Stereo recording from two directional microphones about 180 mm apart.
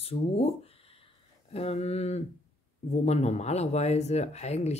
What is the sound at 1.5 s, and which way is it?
Speech, 35° left (ahead or behind).